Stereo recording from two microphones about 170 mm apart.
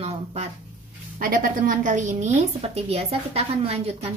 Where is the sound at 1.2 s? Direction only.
55° right (ahead or behind).